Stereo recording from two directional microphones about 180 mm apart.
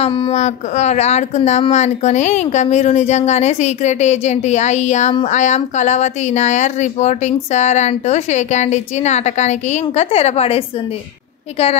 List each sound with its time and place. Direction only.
0.3 s speech: 40° left (ahead or behind)